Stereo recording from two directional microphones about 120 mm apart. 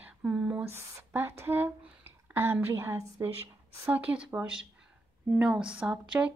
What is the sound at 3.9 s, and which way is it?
A woman's voice, 10° right (ahead or behind).